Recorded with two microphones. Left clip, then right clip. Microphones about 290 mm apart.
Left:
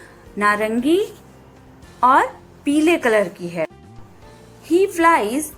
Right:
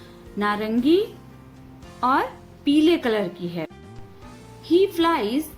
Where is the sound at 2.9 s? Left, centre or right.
Left.